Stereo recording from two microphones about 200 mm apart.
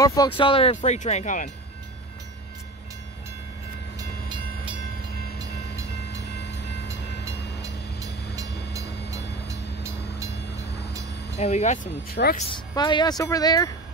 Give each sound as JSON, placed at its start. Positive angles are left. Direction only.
{"t": 0.0, "sound": "speech", "side_deg": 15}
{"t": 6.0, "sound": "train", "side_deg": 55}
{"t": 9.1, "sound": "train", "side_deg": -15}
{"t": 11.3, "sound": "speech", "side_deg": 35}
{"t": 12.4, "sound": "speech", "side_deg": 25}